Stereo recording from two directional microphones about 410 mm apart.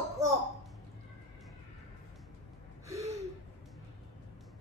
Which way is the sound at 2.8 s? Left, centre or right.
Centre.